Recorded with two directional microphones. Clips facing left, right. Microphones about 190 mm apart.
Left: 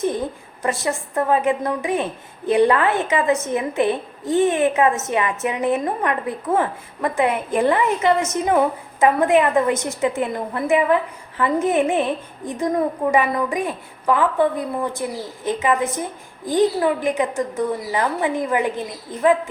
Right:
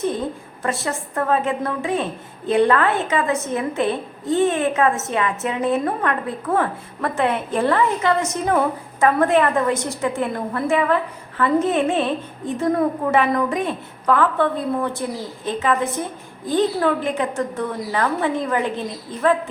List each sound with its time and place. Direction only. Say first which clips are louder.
0.0 s a woman's voice: left 1 dB; 15° left (ahead or behind)